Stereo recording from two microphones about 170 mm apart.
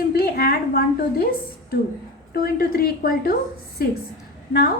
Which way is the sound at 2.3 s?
60° left (ahead or behind).